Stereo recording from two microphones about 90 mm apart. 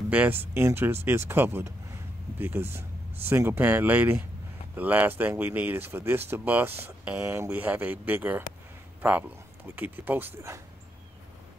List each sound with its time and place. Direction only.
0.1 s speech: 20° right (ahead or behind)
9.8 s speech: 20° right (ahead or behind)